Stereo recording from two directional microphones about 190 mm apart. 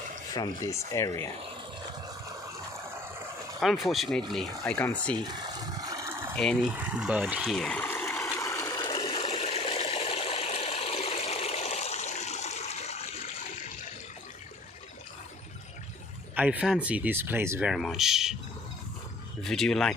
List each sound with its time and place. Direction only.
0.3 s speech: 15° left (ahead or behind)
3.6 s speech: centre (ahead or behind)
5.1 s a sound: 20° right (ahead or behind)
6.3 s water: 5° left (ahead or behind); by 13.1 s 35° left (ahead or behind)
16.3 s speech: 10° right (ahead or behind)
19.4 s speech: centre (ahead or behind)